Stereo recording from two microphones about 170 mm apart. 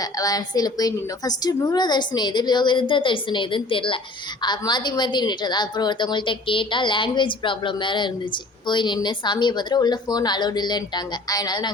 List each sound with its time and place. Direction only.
0.0 s a woman's voice: 20° left (ahead or behind)